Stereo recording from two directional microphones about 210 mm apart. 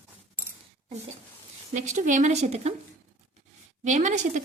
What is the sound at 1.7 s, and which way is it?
A woman's voice, 35° right (ahead or behind).